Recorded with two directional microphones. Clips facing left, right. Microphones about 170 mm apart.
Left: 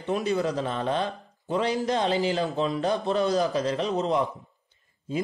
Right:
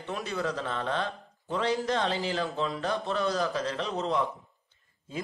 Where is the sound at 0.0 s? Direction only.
15° left (ahead or behind).